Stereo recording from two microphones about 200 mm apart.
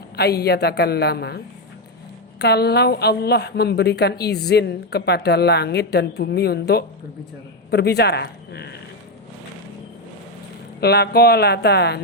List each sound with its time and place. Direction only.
0.2 s a woman's voice: 55° left (ahead or behind)
2.4 s a woman's voice: 55° left (ahead or behind)
10.8 s a woman's voice: 55° left (ahead or behind)